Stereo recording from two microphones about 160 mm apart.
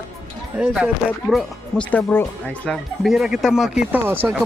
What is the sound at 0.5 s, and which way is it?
Speech, 5° right (ahead or behind).